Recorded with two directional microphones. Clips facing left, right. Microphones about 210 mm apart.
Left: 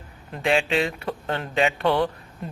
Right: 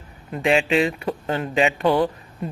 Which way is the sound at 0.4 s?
5° right (ahead or behind).